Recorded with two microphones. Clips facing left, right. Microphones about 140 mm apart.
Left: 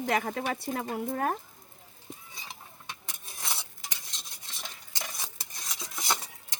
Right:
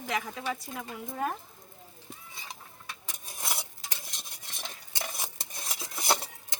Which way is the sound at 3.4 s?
10° right (ahead or behind).